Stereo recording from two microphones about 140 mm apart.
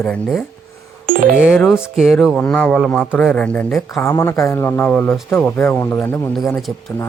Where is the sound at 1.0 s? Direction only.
90° right.